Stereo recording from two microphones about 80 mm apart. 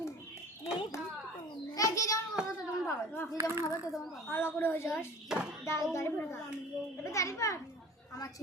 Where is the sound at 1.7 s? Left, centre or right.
Left.